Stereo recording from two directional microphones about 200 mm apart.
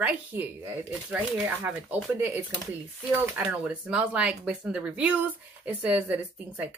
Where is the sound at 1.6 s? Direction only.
10° right (ahead or behind).